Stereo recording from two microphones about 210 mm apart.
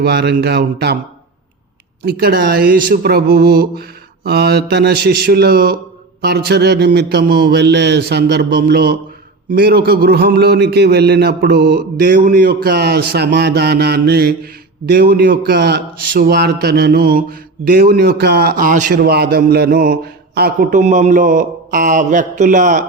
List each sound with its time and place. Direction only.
0.0 s speech: 50° right (ahead or behind)
2.0 s a man's voice: 45° right (ahead or behind)